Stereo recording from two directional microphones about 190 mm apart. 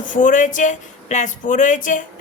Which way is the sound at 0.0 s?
45° left (ahead or behind).